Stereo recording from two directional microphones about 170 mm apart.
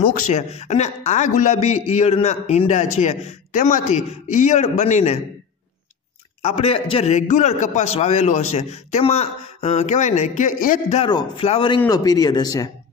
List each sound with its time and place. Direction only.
0.1 s a man's voice: 45° left (ahead or behind)
6.4 s a man's voice: 35° left (ahead or behind)
11.1 s a man's voice: 25° left (ahead or behind)
11.9 s speech: 20° left (ahead or behind)